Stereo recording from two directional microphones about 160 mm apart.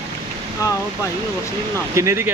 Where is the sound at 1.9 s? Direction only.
15° right (ahead or behind).